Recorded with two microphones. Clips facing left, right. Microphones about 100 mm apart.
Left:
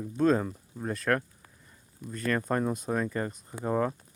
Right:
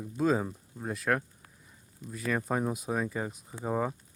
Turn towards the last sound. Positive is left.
turn(degrees=-5)  # may be behind; listen again after turning